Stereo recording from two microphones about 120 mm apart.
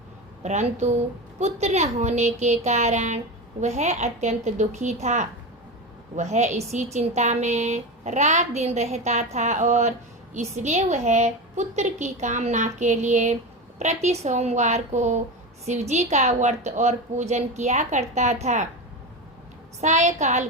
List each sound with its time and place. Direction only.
0.4 s a woman's voice: 75° right (ahead or behind)
13.7 s a woman's voice: 70° right (ahead or behind)
19.8 s a woman's voice: 80° right